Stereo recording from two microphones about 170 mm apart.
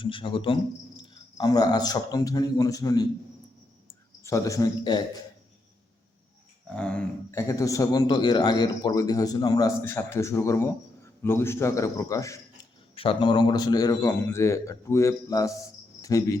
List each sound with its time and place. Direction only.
0.0 s a man's voice: 30° left (ahead or behind)
6.7 s a man's voice: 5° left (ahead or behind)
13.0 s a man's voice: 30° left (ahead or behind)
16.0 s cricket: 20° left (ahead or behind)